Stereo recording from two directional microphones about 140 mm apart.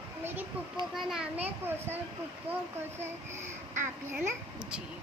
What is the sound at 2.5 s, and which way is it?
Speech, 45° right (ahead or behind).